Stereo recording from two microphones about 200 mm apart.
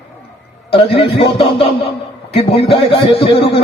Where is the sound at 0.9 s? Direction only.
30° left (ahead or behind).